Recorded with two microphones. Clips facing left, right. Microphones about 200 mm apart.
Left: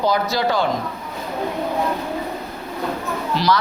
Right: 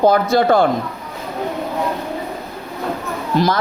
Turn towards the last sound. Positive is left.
turn(degrees=-50)  # may be behind; listen again after turning